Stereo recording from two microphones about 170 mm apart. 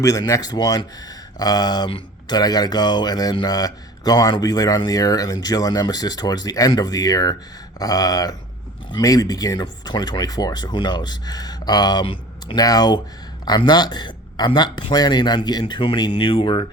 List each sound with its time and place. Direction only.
0.0 s speech: 20° left (ahead or behind)